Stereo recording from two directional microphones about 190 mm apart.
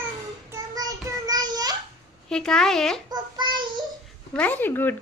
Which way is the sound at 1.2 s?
20° right (ahead or behind).